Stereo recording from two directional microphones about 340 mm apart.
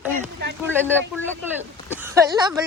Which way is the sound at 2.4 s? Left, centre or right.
Centre.